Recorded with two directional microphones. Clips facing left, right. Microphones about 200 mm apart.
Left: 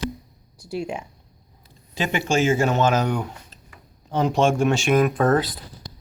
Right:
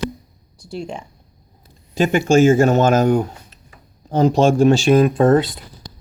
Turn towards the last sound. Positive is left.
turn(degrees=-25)  # may be behind; listen again after turning